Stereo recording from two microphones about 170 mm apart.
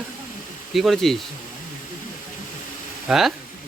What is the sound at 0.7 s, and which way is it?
Speech, centre (ahead or behind).